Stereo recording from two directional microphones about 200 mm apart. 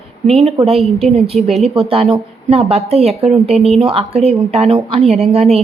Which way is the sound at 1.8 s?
30° right (ahead or behind).